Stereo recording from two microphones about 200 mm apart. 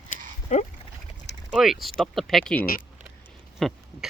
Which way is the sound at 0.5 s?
40° left (ahead or behind).